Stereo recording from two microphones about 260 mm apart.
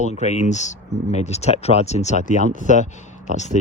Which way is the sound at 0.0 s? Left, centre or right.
Left.